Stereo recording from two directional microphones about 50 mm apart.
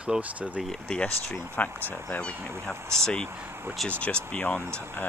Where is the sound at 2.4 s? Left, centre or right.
Right.